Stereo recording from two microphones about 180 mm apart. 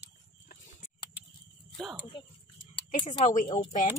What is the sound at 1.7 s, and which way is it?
Speech, 10° right (ahead or behind).